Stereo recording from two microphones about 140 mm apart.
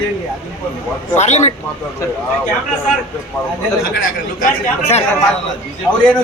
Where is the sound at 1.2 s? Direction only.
55° left (ahead or behind).